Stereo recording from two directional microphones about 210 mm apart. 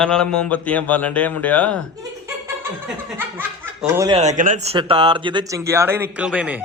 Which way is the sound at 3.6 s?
10° right (ahead or behind).